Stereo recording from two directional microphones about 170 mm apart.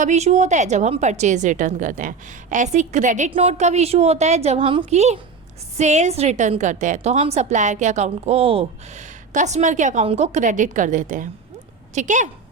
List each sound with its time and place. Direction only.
0.0 s a woman's voice: 40° right (ahead or behind)